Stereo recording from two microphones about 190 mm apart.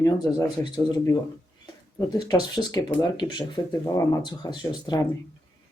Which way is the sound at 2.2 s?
20° left (ahead or behind).